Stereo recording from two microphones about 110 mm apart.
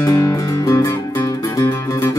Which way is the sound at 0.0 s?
30° left (ahead or behind).